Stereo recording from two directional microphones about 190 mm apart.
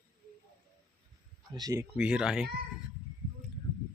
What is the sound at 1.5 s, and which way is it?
Speech, 15° right (ahead or behind).